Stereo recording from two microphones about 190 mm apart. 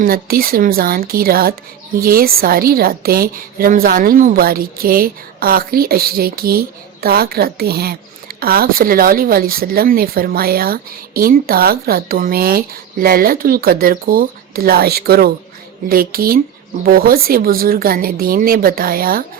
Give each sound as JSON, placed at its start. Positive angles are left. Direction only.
{"t": 0.0, "sound": "speech", "side_deg": -50}